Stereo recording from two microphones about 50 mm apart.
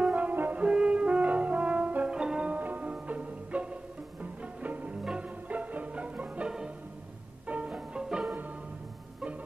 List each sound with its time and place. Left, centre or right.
0.0 s french horn: right
2.0 s music: centre
2.6 s music: right
2.9 s music: right
7.7 s music: centre